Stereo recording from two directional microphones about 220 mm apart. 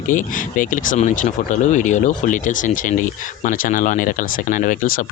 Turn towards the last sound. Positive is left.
turn(degrees=40)  # may be behind; listen again after turning